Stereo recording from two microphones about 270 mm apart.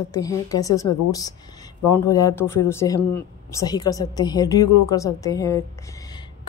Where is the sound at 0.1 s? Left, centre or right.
Centre.